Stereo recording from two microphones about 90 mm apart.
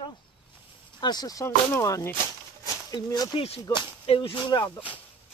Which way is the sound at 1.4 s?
35° left (ahead or behind).